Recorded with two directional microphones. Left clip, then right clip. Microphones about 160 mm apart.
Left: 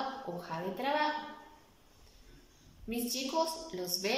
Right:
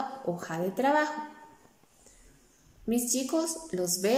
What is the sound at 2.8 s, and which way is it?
A woman's voice, 50° right (ahead or behind).